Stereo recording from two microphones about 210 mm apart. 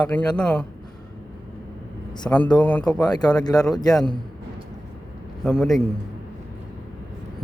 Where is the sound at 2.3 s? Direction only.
5° left (ahead or behind).